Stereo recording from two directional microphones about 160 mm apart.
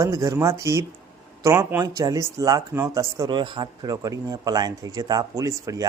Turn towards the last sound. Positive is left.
turn(degrees=-20)  # may be behind; listen again after turning